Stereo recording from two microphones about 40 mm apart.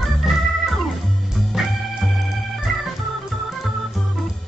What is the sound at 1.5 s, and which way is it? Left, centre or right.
Music, centre.